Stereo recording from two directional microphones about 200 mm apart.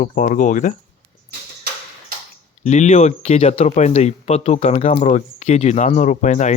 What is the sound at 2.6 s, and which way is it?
Speech, 35° left (ahead or behind).